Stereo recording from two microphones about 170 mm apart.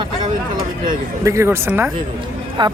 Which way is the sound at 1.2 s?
15° right (ahead or behind).